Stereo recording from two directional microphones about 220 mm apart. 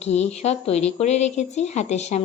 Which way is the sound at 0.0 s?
30° left (ahead or behind).